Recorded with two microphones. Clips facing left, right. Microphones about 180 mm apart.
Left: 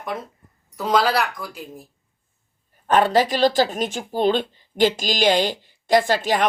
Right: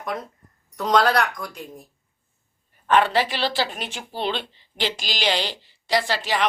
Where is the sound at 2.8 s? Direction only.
40° left (ahead or behind).